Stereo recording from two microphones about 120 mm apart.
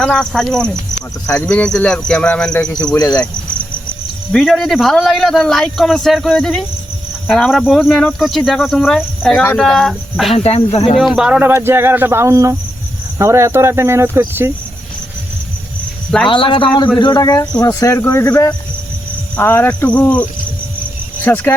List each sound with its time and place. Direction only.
0.0 s a man's voice: 5° left (ahead or behind)
2.6 s speech: 30° left (ahead or behind)
4.3 s a man's voice: centre (ahead or behind)
10.3 s speech: 55° left (ahead or behind)
11.0 s speech: 5° right (ahead or behind)
16.3 s a man's voice: 45° left (ahead or behind); by 20.2 s 10° left (ahead or behind)
21.2 s speech: 20° left (ahead or behind)